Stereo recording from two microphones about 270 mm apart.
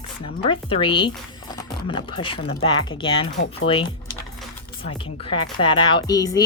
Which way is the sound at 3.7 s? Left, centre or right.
Centre.